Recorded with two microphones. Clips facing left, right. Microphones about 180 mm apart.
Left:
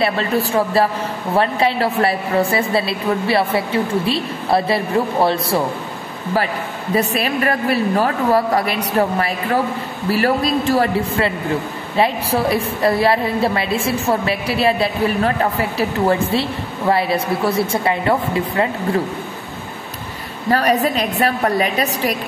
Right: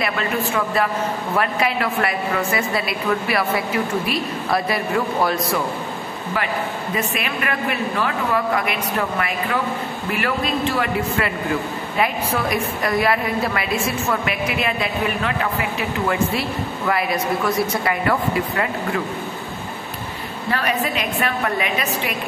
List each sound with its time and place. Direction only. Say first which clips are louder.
0.0 s a woman's voice: left 4 dB; 30° left (ahead or behind)
7.0 s a woman's voice: left 8 dB; 35° left (ahead or behind)
20.4 s a woman's voice: left 7 dB; 40° left (ahead or behind)